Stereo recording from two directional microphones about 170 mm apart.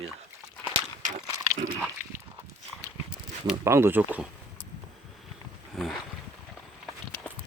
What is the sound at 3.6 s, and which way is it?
Speech, 15° right (ahead or behind).